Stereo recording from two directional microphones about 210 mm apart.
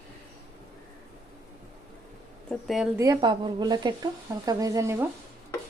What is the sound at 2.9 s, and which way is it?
A woman's voice, 15° right (ahead or behind).